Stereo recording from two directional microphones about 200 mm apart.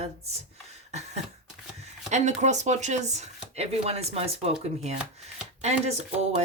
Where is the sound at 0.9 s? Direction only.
35° right (ahead or behind).